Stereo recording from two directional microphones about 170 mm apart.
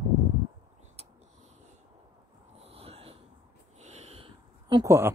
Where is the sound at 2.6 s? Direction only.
35° right (ahead or behind).